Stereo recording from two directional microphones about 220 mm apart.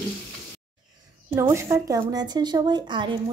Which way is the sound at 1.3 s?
10° right (ahead or behind).